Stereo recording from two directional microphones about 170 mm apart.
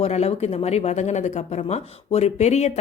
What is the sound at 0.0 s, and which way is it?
Speech, 40° left (ahead or behind).